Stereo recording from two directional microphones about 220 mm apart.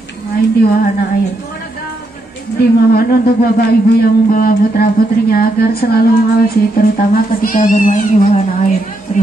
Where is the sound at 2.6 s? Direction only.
45° left (ahead or behind).